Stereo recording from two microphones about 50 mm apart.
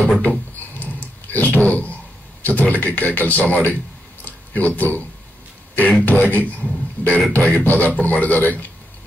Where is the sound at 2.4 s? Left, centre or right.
Left.